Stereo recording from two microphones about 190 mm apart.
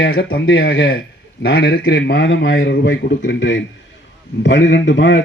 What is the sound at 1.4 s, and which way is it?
A man's voice, 60° left (ahead or behind).